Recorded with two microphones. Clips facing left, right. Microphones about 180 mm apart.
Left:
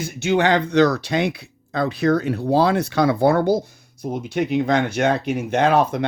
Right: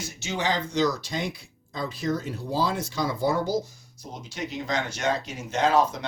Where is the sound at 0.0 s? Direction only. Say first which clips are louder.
Left 11 dB; 60° left (ahead or behind).